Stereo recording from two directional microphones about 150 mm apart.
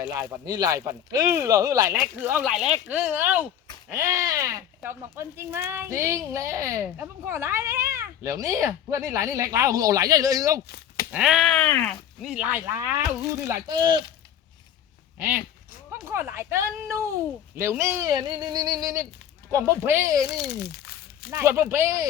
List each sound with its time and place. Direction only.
0.0 s speech: 20° right (ahead or behind)
1.9 s speech: 10° right (ahead or behind)
11.1 s speech: 5° right (ahead or behind)
12.2 s speech: 5° right (ahead or behind)
13.7 s speech: 25° right (ahead or behind)
15.9 s speech: 15° right (ahead or behind)
18.1 s speech: 30° right (ahead or behind)
20.2 s a sound: 90° left
21.2 s speech: 15° right (ahead or behind)